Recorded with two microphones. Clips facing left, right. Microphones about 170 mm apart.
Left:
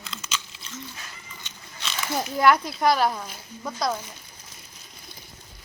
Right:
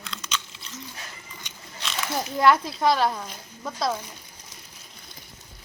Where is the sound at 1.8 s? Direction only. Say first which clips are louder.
Left 1 dB; centre (ahead or behind).